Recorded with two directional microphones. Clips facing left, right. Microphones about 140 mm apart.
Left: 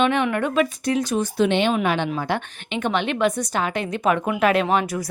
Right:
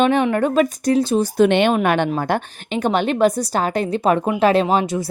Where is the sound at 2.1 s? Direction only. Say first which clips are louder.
Right 4 dB; 45° right (ahead or behind); by 5.1 s 25° right (ahead or behind).